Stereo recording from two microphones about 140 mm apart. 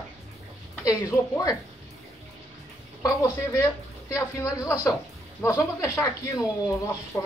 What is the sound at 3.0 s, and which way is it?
Speech, 20° left (ahead or behind).